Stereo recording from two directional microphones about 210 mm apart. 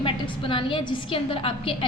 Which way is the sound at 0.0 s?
25° left (ahead or behind).